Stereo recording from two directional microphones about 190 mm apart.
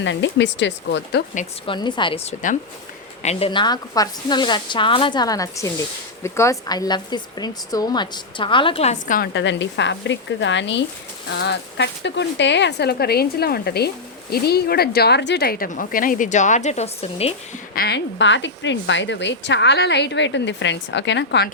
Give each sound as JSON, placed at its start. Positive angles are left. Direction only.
{"t": 0.0, "sound": "a woman's voice", "side_deg": 70}
{"t": 1.6, "sound": "a woman's voice", "side_deg": 25}
{"t": 9.3, "sound": "a woman's voice", "side_deg": 70}
{"t": 17.7, "sound": "a woman's voice", "side_deg": 60}